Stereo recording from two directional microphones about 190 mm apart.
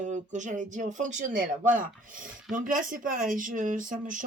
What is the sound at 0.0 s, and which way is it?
Speech, 40° right (ahead or behind).